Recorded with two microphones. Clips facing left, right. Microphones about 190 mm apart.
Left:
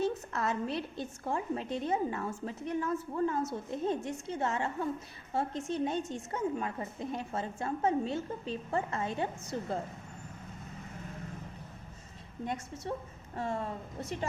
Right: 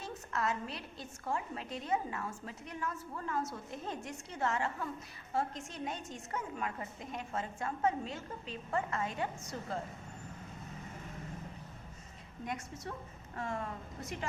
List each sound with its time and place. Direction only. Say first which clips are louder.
0.3 s a woman's voice: left 4 dB; 25° left (ahead or behind)
13.3 s a woman's voice: left 4 dB; 25° left (ahead or behind)